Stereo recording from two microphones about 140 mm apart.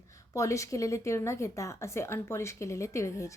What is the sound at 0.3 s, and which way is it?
A woman's voice, 20° left (ahead or behind).